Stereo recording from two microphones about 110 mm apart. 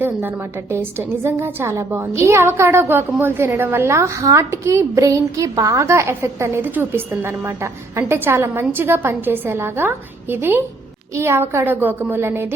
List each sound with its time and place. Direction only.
0.0 s a woman's voice: 20° right (ahead or behind)